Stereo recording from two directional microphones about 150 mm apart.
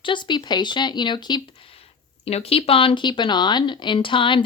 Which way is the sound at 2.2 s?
40° left (ahead or behind).